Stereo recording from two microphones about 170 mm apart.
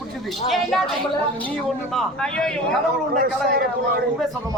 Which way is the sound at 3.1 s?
60° right (ahead or behind).